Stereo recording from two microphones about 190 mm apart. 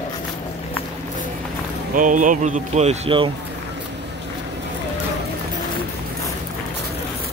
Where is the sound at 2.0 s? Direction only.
45° right (ahead or behind).